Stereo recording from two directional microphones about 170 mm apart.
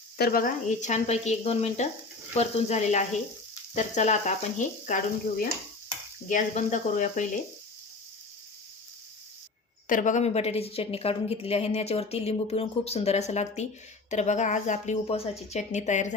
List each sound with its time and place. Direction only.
0.2 s a woman's voice: 60° left (ahead or behind)
9.8 s a woman's voice: 50° left (ahead or behind)